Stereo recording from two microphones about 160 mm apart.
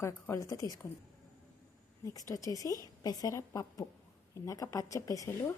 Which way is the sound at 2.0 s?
20° left (ahead or behind).